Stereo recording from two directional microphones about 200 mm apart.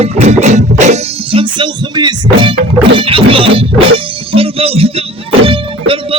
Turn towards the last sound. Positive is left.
turn(degrees=-25)  # may be behind; listen again after turning